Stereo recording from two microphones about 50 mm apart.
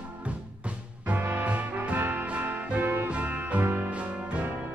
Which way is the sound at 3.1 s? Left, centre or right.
Right.